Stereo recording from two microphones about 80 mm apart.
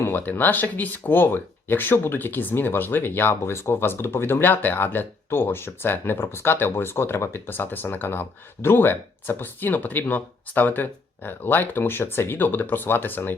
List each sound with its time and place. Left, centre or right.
0.0 s speech: left